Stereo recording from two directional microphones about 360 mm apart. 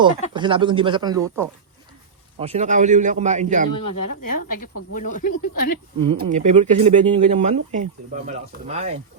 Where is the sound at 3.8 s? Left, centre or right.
Left.